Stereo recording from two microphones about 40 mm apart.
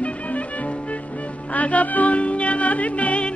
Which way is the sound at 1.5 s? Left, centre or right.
Left.